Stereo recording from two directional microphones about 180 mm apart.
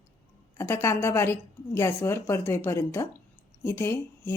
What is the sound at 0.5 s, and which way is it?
A woman's voice, 15° left (ahead or behind).